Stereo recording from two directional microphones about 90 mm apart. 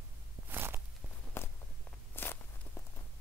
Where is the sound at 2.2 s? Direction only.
20° left (ahead or behind).